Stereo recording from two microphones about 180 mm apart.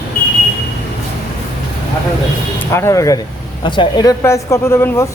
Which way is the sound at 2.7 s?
15° left (ahead or behind).